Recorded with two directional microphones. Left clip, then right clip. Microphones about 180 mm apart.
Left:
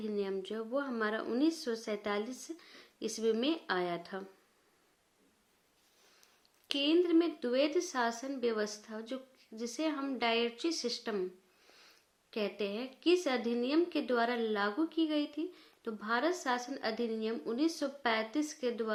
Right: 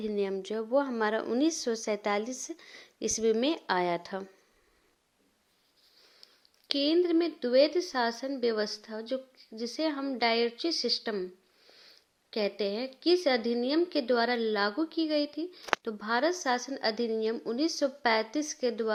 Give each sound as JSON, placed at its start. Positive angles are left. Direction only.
{"t": 0.0, "sound": "a woman's voice", "side_deg": -40}
{"t": 6.7, "sound": "a woman's voice", "side_deg": -40}
{"t": 12.3, "sound": "a woman's voice", "side_deg": -35}